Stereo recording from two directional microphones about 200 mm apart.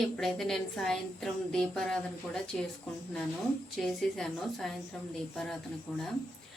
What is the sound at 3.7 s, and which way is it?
A woman's voice, centre (ahead or behind).